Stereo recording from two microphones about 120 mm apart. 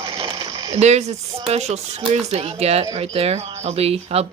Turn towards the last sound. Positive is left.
turn(degrees=-55)  # may be behind; listen again after turning